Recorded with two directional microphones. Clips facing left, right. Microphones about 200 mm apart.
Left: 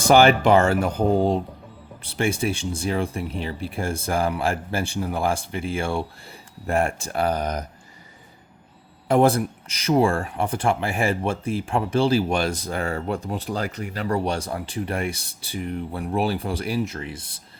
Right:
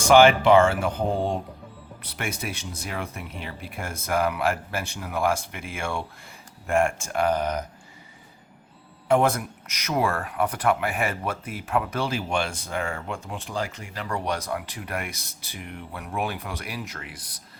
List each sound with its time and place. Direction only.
0.0 s speech: 35° left (ahead or behind)
2.0 s speech: 30° left (ahead or behind)
9.0 s speech: 35° left (ahead or behind)